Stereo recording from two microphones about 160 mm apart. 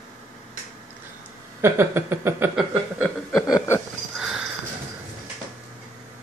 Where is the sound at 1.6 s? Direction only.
15° right (ahead or behind).